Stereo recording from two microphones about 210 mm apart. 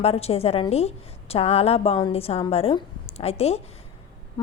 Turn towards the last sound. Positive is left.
turn(degrees=30)  # may be behind; listen again after turning